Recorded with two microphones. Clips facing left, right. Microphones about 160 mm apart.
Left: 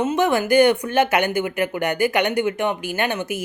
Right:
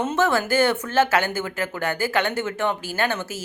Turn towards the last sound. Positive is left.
turn(degrees=15)  # may be behind; listen again after turning